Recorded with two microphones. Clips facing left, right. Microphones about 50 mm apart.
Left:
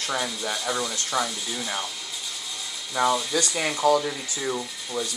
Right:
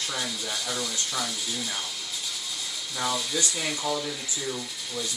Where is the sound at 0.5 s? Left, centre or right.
Centre.